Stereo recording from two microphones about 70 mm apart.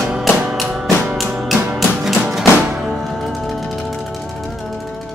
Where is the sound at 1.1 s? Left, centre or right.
Centre.